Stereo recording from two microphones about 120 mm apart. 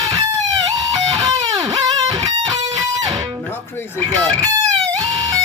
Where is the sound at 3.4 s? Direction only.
20° left (ahead or behind).